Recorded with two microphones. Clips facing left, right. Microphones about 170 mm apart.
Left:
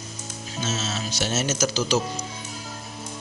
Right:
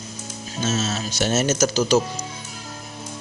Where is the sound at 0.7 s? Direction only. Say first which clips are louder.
Right 5 dB; 50° right (ahead or behind).